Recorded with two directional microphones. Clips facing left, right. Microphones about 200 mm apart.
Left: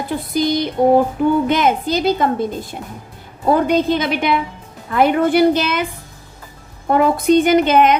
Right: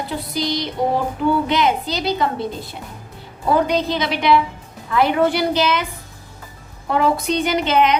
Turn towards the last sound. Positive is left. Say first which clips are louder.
# left 5 dB
turn(degrees=50)  # may be behind; listen again after turning